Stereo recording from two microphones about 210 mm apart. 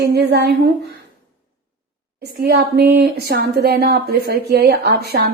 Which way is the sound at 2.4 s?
50° right (ahead or behind).